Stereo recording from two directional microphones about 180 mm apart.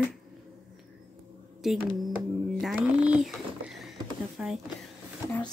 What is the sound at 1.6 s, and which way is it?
Speech, centre (ahead or behind).